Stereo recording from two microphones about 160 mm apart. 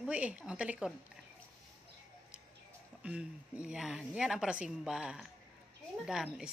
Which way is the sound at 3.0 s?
5° right (ahead or behind).